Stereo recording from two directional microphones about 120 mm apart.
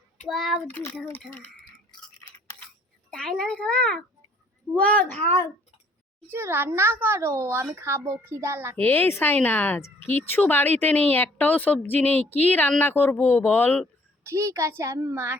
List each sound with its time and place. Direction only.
0.3 s a child's voice: centre (ahead or behind)
0.7 s speech: 20° left (ahead or behind)
3.1 s a woman's voice: 5° left (ahead or behind)
6.3 s a child's voice: 20° right (ahead or behind)
8.7 s a woman's voice: 15° left (ahead or behind)
14.3 s a child's voice: 25° right (ahead or behind)